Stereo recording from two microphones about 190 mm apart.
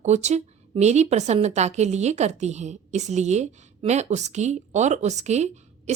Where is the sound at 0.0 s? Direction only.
35° right (ahead or behind).